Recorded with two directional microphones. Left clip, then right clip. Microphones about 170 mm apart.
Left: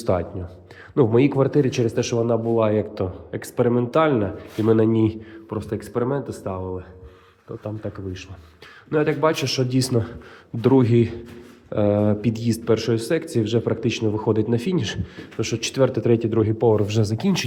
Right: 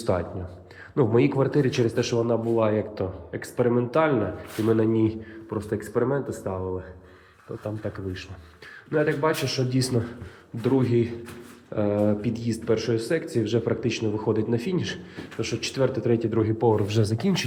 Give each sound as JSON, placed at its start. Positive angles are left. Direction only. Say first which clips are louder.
{"t": 0.0, "sound": "speech", "louder": "left 3 dB", "side_deg": 25}
{"t": 5.5, "sound": "speech", "louder": "even", "side_deg": 20}
{"t": 7.6, "sound": "speech", "louder": "left 1 dB", "side_deg": 20}
{"t": 8.9, "sound": "a man's voice", "louder": "left 3 dB", "side_deg": 35}